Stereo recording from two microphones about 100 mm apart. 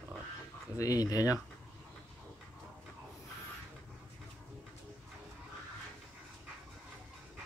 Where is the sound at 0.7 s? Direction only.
40° left (ahead or behind).